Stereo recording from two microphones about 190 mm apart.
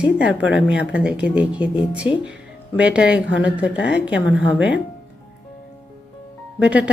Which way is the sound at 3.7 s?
70° left (ahead or behind).